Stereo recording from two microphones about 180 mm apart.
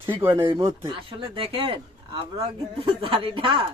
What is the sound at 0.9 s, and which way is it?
A man's voice, 30° right (ahead or behind).